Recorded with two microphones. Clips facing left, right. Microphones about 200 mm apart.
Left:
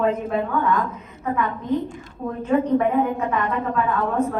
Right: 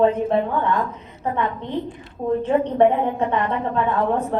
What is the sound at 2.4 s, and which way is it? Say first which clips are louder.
Speech: right 1 dB; 30° right (ahead or behind).